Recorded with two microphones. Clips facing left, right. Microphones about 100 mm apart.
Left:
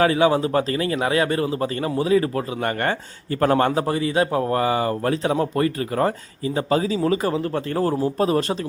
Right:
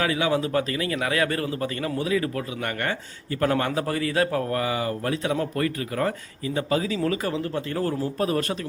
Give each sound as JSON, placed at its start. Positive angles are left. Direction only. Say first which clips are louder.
{"t": 0.0, "sound": "a man's voice", "louder": "left 6 dB", "side_deg": 35}
{"t": 3.8, "sound": "a man's voice", "louder": "left 3 dB", "side_deg": 20}
{"t": 5.4, "sound": "speech", "louder": "left 5 dB", "side_deg": 25}
{"t": 7.3, "sound": "a man's voice", "louder": "left 4 dB", "side_deg": 40}
{"t": 8.0, "sound": "speech", "louder": "left 5 dB", "side_deg": 25}